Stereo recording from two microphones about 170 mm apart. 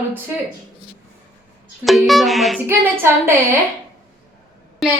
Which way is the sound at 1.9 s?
Centre (ahead or behind).